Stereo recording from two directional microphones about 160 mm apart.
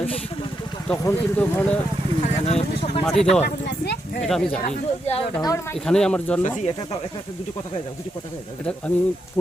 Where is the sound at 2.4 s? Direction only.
40° left (ahead or behind).